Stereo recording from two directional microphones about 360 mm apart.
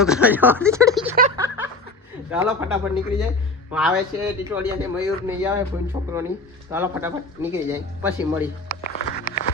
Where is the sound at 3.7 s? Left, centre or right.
Centre.